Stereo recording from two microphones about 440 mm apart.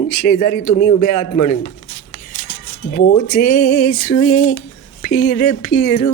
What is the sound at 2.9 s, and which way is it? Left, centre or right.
Music, centre.